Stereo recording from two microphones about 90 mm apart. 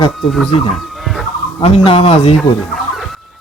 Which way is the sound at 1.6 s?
90° left.